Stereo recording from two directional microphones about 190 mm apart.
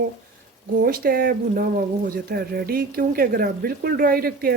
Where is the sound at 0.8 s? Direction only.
50° right (ahead or behind).